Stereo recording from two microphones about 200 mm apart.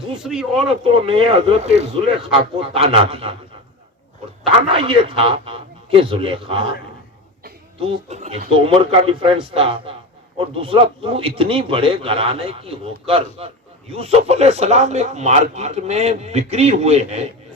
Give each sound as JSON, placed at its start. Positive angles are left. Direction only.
{"t": 0.2, "sound": "speech", "side_deg": -5}
{"t": 0.9, "sound": "a man's voice", "side_deg": -25}
{"t": 4.7, "sound": "a man's voice", "side_deg": -25}
{"t": 7.8, "sound": "a man's voice", "side_deg": -30}